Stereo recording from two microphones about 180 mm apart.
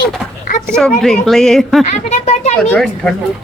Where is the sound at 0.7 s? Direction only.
5° left (ahead or behind).